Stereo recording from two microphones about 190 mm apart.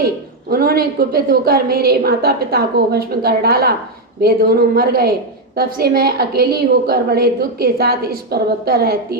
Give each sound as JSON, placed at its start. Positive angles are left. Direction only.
{"t": 0.5, "sound": "a woman's voice", "side_deg": -55}